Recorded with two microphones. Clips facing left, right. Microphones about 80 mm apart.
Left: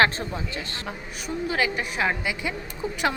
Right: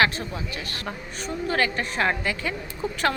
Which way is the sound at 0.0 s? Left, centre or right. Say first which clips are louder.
Left 1 dB; left.